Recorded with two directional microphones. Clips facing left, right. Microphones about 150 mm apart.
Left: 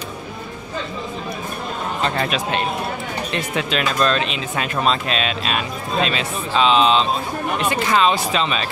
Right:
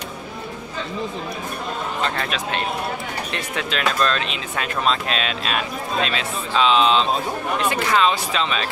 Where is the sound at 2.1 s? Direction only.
15° left (ahead or behind).